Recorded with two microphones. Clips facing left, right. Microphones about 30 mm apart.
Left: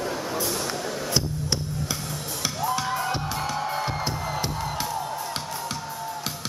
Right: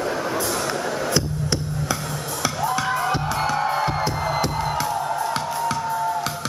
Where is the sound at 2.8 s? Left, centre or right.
Centre.